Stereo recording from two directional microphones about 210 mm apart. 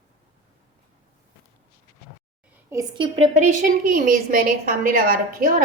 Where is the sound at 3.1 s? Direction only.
30° right (ahead or behind).